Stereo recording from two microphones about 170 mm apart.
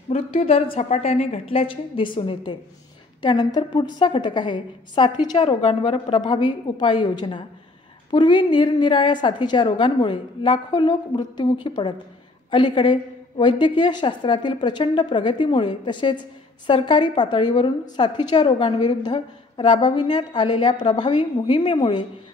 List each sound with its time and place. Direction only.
0.1 s a woman's voice: 35° left (ahead or behind)
5.6 s a woman's voice: 35° left (ahead or behind)